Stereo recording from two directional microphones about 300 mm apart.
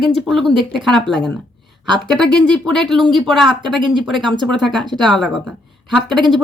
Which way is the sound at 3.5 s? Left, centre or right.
Centre.